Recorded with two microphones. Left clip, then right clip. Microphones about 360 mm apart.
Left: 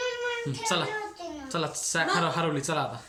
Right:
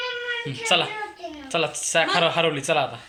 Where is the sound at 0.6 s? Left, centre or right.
Centre.